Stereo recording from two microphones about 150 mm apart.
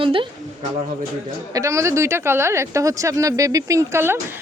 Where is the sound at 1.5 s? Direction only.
20° right (ahead or behind).